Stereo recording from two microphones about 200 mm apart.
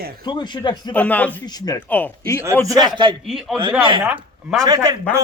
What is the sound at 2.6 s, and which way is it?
Speech, 20° right (ahead or behind).